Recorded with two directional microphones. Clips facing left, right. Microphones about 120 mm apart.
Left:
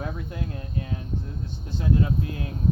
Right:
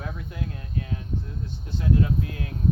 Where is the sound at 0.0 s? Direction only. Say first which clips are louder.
Left 2 dB; 35° left (ahead or behind).